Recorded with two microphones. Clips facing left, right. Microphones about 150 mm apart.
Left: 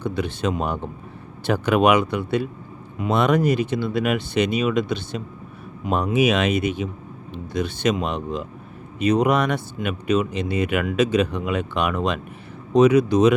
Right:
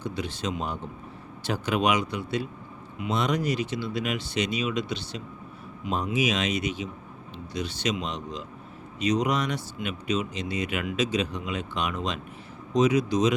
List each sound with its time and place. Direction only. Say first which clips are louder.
0.0 s speech: left 7 dB; 60° left (ahead or behind)
5.9 s speech: left 7 dB; 60° left (ahead or behind)